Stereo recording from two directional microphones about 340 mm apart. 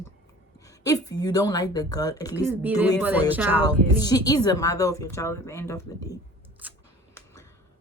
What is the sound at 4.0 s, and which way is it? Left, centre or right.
Speech, centre.